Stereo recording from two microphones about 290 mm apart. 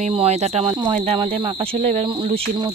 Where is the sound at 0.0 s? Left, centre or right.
Right.